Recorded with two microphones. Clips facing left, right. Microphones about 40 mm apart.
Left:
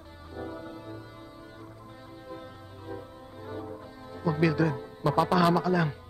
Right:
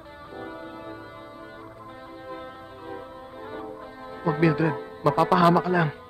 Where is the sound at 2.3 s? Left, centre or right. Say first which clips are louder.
Right 5 dB; right.